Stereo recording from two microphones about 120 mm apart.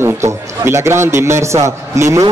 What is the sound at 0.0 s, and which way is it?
A man's voice, 20° right (ahead or behind).